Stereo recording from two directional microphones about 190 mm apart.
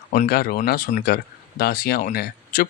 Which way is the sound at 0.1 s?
50° left (ahead or behind).